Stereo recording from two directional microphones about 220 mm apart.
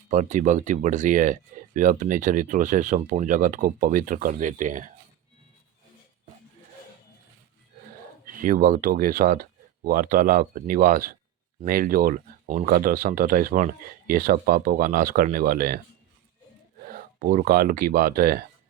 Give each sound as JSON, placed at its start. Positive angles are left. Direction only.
{"t": 0.1, "sound": "speech", "side_deg": -35}
{"t": 8.2, "sound": "speech", "side_deg": -35}
{"t": 16.8, "sound": "speech", "side_deg": -40}